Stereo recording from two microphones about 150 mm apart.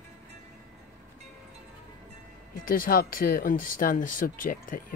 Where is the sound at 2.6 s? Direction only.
70° left (ahead or behind).